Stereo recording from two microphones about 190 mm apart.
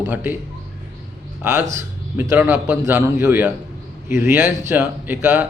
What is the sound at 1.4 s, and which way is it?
A man's voice, 10° right (ahead or behind).